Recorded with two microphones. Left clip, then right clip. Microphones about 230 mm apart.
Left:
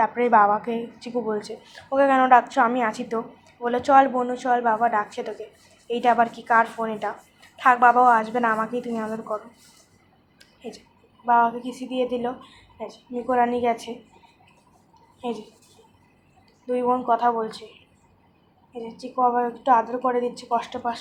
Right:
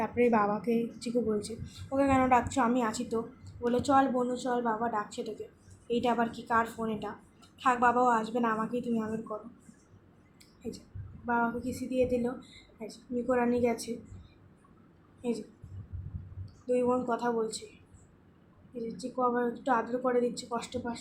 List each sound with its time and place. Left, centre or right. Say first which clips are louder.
0.0 s a woman's voice: left 9 dB; centre
3.7 s a woman's voice: left 9 dB; centre
11.3 s a woman's voice: left 11 dB; left
16.6 s a woman's voice: left 7 dB; left
18.9 s a woman's voice: left 9 dB; left